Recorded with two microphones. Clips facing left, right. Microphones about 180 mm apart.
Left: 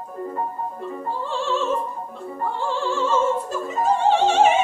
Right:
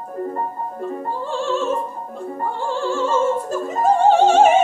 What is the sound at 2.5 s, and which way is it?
Opera, 45° right (ahead or behind).